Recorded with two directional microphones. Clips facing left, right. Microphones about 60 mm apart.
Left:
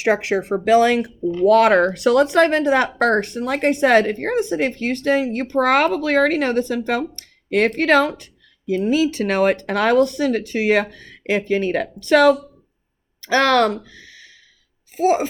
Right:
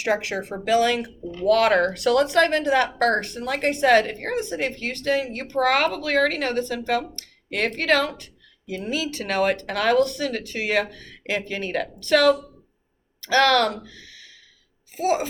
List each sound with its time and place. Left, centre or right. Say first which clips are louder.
0.0 s speech: left 5 dB; left